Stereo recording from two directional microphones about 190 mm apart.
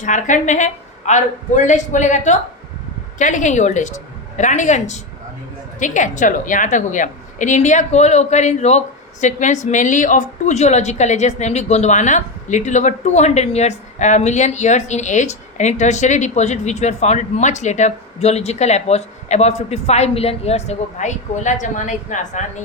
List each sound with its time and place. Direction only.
0.0 s a woman's voice: 40° left (ahead or behind)